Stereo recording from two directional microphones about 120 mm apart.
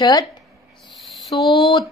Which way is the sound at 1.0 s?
Centre (ahead or behind).